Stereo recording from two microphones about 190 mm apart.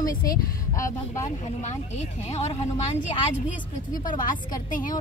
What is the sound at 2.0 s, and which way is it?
Speech, 35° left (ahead or behind).